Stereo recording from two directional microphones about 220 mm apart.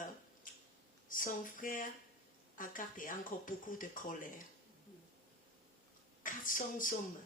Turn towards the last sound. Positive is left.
turn(degrees=40)  # may be behind; listen again after turning